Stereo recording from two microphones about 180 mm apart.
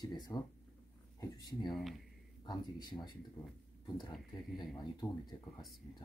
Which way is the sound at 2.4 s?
25° left (ahead or behind).